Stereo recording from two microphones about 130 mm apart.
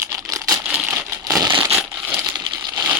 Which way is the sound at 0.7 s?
5° right (ahead or behind).